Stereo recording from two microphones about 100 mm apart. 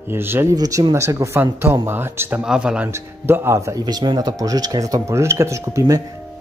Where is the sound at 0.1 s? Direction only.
25° right (ahead or behind).